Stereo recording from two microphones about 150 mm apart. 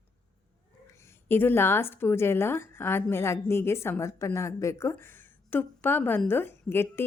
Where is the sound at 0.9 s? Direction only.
15° left (ahead or behind).